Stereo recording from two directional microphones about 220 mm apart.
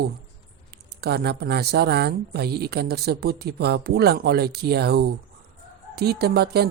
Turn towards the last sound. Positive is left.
turn(degrees=-45)  # may be behind; listen again after turning